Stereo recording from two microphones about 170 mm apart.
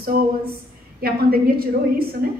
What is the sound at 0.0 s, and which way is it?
A woman's voice, 65° right (ahead or behind).